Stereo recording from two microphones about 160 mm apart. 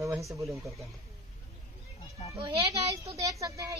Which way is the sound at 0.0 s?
20° right (ahead or behind).